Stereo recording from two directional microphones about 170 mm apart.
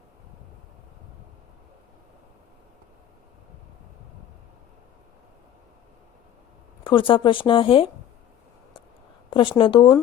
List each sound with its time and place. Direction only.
6.8 s speech: 30° left (ahead or behind)
9.3 s speech: 30° left (ahead or behind)